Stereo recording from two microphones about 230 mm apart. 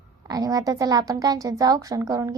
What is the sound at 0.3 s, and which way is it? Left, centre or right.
A child's voice, centre.